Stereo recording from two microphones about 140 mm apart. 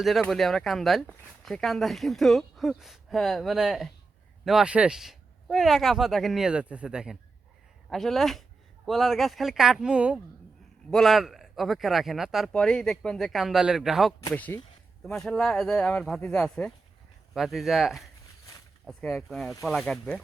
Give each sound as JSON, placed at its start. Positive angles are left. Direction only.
{"t": 0.0, "sound": "speech", "side_deg": 0}
{"t": 14.3, "sound": "speech", "side_deg": 10}